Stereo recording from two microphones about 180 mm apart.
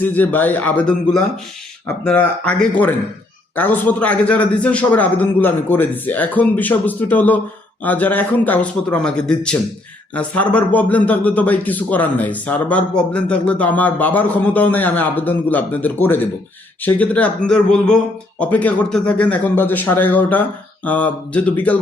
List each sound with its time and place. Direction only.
0.0 s speech: 10° left (ahead or behind)